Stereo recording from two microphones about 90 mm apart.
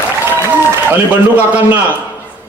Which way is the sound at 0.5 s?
15° right (ahead or behind).